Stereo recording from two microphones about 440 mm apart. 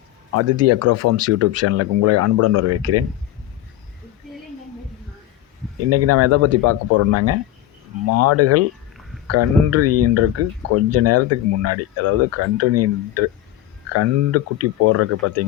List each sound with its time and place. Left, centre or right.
0.3 s speech: right
5.9 s speech: right